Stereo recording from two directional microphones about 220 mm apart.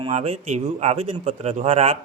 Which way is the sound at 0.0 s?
30° right (ahead or behind).